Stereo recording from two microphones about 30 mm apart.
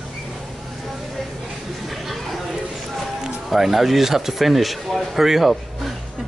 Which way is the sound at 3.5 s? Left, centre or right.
Centre.